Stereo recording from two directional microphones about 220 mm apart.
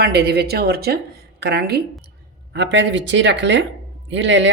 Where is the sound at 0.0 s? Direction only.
45° right (ahead or behind).